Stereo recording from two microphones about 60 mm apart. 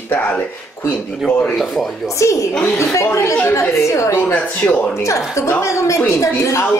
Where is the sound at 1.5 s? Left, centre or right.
Centre.